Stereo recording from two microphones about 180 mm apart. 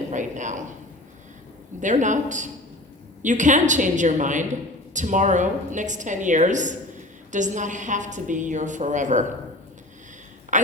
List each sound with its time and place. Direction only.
0.1 s speech: 45° right (ahead or behind)
1.8 s a woman's voice: 45° right (ahead or behind)
10.5 s a woman's voice: 45° right (ahead or behind)